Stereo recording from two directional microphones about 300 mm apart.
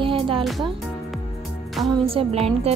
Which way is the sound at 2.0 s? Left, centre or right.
Centre.